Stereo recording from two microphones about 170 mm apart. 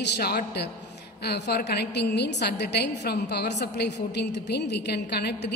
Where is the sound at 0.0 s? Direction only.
80° left.